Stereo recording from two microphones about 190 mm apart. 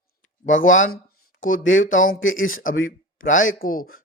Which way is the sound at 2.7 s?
90° left.